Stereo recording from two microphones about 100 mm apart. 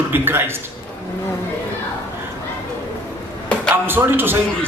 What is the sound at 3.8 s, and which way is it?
Speech, 20° right (ahead or behind).